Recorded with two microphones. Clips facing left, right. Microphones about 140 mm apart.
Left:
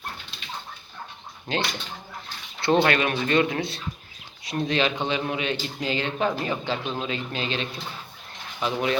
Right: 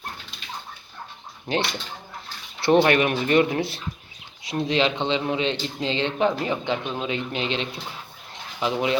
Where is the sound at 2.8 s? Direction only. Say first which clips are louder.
Right 3 dB; 20° right (ahead or behind).